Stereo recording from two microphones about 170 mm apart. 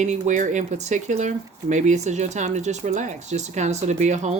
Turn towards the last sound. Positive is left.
turn(degrees=-45)  # may be behind; listen again after turning